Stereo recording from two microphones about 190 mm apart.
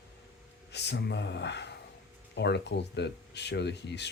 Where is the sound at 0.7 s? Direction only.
60° left (ahead or behind).